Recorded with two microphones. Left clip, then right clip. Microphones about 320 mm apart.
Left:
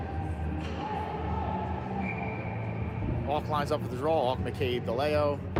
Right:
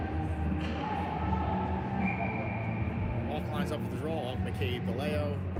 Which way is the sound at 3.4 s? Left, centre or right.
Centre.